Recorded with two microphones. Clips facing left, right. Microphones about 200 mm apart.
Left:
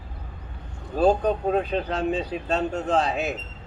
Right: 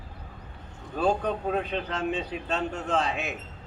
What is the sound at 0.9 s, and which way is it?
Speech, 35° left (ahead or behind).